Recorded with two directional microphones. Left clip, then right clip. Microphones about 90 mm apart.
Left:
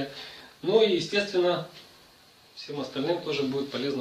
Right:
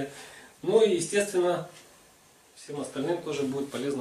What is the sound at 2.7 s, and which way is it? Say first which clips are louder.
Speech: left 2 dB; 10° right (ahead or behind).